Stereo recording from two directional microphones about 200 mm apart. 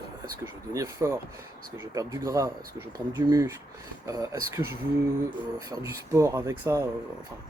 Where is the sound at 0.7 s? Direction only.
15° right (ahead or behind).